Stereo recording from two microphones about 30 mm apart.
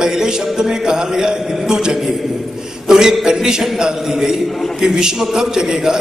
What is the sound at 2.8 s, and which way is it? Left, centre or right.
Speech, centre.